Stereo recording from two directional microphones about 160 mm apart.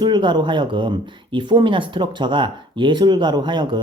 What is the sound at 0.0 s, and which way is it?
Speech, 30° right (ahead or behind).